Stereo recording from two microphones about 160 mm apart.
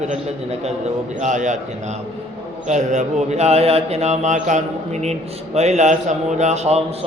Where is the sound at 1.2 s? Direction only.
50° right (ahead or behind).